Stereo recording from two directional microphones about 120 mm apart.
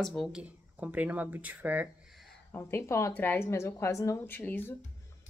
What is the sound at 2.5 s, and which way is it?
Speech, 20° left (ahead or behind).